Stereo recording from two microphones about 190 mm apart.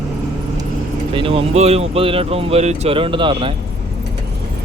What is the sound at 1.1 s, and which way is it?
Speech, 30° right (ahead or behind).